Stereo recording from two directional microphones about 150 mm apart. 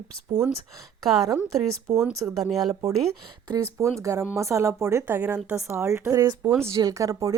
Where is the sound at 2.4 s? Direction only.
Centre (ahead or behind).